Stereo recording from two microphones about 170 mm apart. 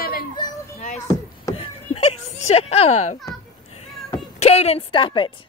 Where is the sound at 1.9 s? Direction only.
40° left (ahead or behind).